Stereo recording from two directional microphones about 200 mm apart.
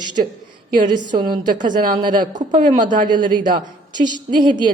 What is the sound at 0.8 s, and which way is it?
A woman's voice, 20° right (ahead or behind).